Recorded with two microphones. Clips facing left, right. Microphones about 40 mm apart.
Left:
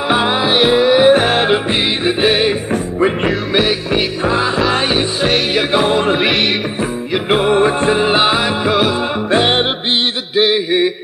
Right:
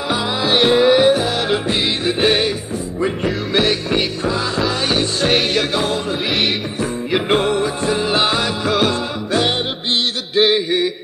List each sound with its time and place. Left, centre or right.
0.4 s music: centre
1.1 s music: left
2.0 s music: centre
3.5 s music: centre
5.5 s music: centre
7.2 s music: centre
7.5 s music: left; by 8.9 s centre
9.3 s music: left
10.3 s a sound: centre